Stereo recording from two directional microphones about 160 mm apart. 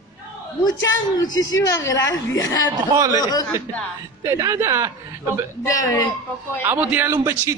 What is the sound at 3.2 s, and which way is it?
Speech, 25° left (ahead or behind).